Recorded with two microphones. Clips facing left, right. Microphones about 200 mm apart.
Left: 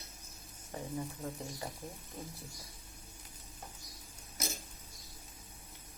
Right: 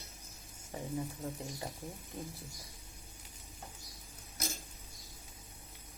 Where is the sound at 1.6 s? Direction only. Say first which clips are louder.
Even; 25° right (ahead or behind).